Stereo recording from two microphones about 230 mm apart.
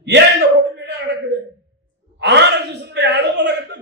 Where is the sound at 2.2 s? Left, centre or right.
Right.